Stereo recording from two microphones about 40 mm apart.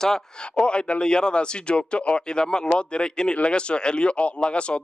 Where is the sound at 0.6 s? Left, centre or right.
Left.